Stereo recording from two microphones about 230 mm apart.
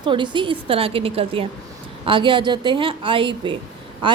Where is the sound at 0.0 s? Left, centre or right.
Centre.